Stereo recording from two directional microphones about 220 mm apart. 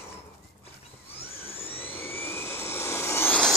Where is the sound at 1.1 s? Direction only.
25° left (ahead or behind).